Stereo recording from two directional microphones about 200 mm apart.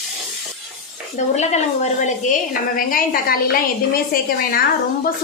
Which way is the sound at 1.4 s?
35° left (ahead or behind).